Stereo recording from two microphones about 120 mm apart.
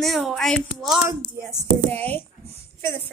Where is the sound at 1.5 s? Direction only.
15° left (ahead or behind).